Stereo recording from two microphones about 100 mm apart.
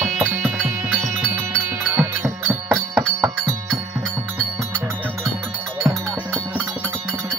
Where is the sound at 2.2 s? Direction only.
25° right (ahead or behind).